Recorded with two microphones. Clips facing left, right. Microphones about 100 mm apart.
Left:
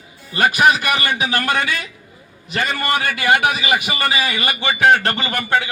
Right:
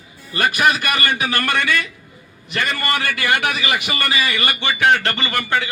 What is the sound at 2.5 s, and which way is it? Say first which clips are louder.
A man's voice: left 2 dB; 30° left (ahead or behind).